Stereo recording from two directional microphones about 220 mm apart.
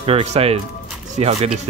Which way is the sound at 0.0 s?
30° right (ahead or behind).